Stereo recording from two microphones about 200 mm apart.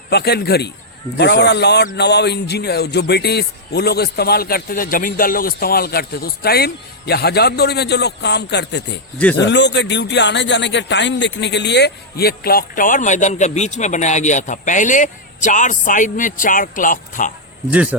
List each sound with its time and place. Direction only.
0.1 s speech: 55° left (ahead or behind)
9.1 s a man's voice: 5° left (ahead or behind)
9.4 s speech: 60° left (ahead or behind); by 17.3 s 40° left (ahead or behind)